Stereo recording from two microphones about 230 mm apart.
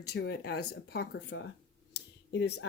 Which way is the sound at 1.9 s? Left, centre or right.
Left.